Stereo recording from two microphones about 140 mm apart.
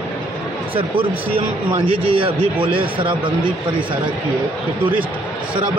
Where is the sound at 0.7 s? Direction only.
40° right (ahead or behind).